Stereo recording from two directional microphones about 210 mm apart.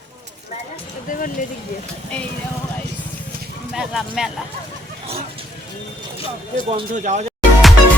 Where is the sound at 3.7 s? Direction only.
5° right (ahead or behind).